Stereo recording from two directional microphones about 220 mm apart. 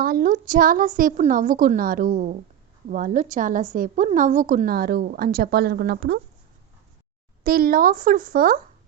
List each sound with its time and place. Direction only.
0.0 s a woman's voice: 40° right (ahead or behind)
7.4 s a woman's voice: 40° right (ahead or behind)